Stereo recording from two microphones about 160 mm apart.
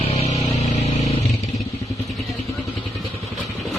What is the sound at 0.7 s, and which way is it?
Vehicle, 45° left (ahead or behind).